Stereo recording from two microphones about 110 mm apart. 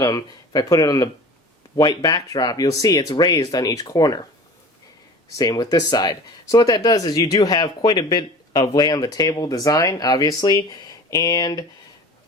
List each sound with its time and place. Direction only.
0.0 s speech: 35° left (ahead or behind)
5.4 s speech: 35° left (ahead or behind)